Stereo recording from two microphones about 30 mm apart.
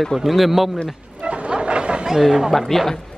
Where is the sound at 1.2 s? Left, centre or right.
Right.